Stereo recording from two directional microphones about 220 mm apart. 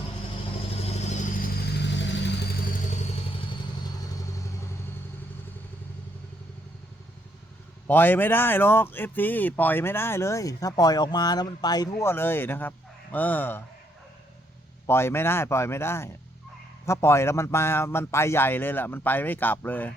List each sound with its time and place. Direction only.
0.9 s vehicle: 30° left (ahead or behind); by 2.5 s 55° left (ahead or behind)
7.9 s speech: 10° left (ahead or behind)
14.8 s speech: 10° left (ahead or behind)